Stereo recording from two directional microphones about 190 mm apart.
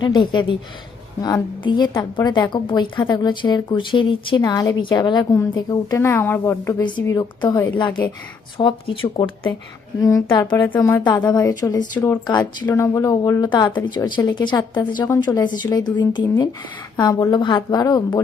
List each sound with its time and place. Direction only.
0.0 s a woman's voice: 25° left (ahead or behind)
10.7 s a woman's voice: 10° left (ahead or behind)
12.3 s a woman's voice: 20° left (ahead or behind)